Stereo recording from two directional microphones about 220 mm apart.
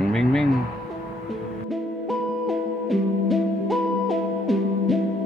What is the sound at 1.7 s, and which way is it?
Music, centre (ahead or behind).